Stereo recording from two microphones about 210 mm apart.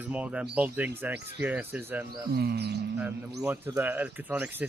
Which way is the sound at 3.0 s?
10° right (ahead or behind).